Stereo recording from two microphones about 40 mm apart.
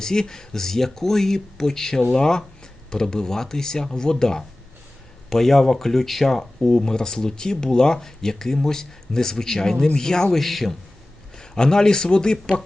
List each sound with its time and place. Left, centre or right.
0.0 s speech: centre
10.4 s a man's voice: centre
11.3 s speech: centre